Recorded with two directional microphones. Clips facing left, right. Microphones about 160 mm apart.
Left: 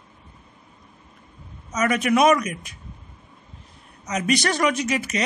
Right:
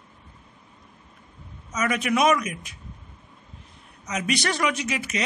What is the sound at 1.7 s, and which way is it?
Speech, 40° left (ahead or behind).